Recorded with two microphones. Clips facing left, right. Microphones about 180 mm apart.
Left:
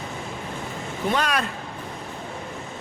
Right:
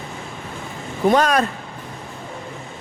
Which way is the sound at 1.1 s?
45° right (ahead or behind).